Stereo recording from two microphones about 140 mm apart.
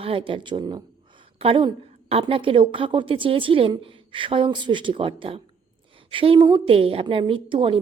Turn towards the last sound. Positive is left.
turn(degrees=-40)  # may be behind; listen again after turning